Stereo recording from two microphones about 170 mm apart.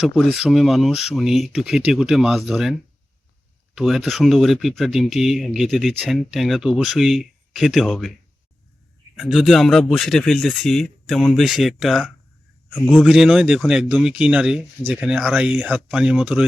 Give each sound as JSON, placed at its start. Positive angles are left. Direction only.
{"t": 0.0, "sound": "speech", "side_deg": 0}
{"t": 3.8, "sound": "speech", "side_deg": 0}
{"t": 9.1, "sound": "speech", "side_deg": 0}